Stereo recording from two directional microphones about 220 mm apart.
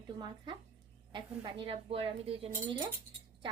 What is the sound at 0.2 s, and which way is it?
A woman's voice, 20° right (ahead or behind).